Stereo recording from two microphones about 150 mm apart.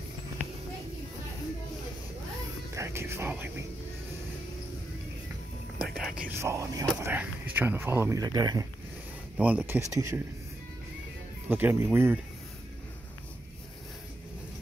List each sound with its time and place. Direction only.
2.7 s music: 20° right (ahead or behind)
5.9 s whispering: 5° right (ahead or behind)
6.3 s speech: 20° right (ahead or behind)
9.4 s speech: 10° right (ahead or behind)
11.4 s speech: 15° right (ahead or behind)